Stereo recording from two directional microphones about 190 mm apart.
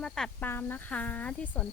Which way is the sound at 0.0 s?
5° left (ahead or behind).